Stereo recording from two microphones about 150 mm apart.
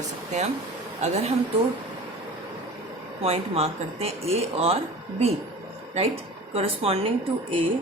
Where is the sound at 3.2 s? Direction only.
40° right (ahead or behind).